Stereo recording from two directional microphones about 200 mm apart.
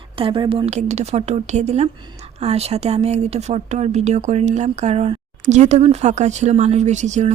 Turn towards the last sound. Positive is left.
turn(degrees=-35)  # may be behind; listen again after turning